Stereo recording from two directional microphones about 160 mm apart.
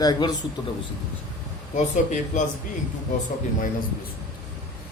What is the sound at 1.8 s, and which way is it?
Speech, 50° left (ahead or behind).